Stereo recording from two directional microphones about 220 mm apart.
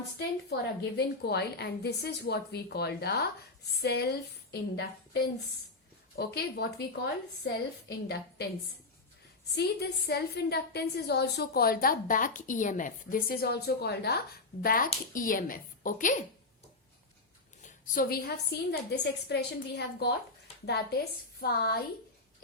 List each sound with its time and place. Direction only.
0.2 s a woman's voice: 45° left (ahead or behind)
6.1 s a woman's voice: 45° left (ahead or behind)
9.6 s a woman's voice: 50° left (ahead or behind)
17.6 s a woman's voice: 40° left (ahead or behind)
21.4 s a woman's voice: 45° left (ahead or behind)